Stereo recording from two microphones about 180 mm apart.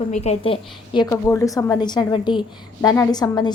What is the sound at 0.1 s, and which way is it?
A woman's voice, 35° left (ahead or behind).